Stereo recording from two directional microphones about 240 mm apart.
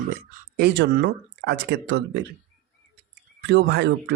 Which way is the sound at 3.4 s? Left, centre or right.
Right.